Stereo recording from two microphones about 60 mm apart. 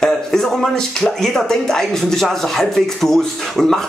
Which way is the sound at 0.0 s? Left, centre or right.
Centre.